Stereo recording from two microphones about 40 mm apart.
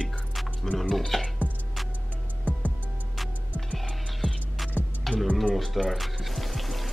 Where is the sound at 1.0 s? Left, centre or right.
Centre.